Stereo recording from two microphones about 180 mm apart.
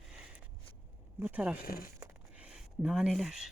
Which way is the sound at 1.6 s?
55° left (ahead or behind).